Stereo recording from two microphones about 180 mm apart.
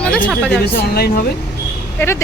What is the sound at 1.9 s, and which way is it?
Speech, 15° left (ahead or behind).